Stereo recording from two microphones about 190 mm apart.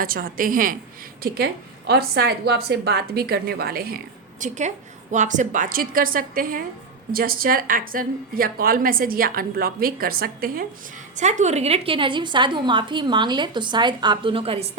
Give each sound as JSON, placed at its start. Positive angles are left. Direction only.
{"t": 0.0, "sound": "a woman's voice", "side_deg": -50}
{"t": 11.2, "sound": "a woman's voice", "side_deg": -40}